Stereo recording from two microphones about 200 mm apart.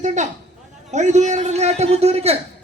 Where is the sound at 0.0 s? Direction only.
35° right (ahead or behind).